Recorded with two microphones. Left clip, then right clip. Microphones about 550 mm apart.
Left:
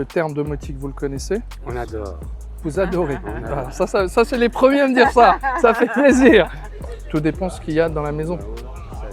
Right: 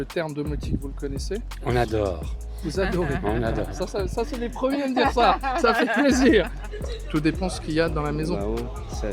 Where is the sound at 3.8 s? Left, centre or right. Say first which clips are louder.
Left 11 dB; left.